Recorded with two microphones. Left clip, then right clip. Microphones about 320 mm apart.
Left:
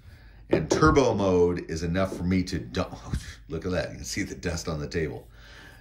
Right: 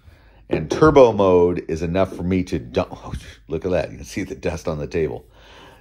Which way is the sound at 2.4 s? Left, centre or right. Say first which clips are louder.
Right 9 dB; centre.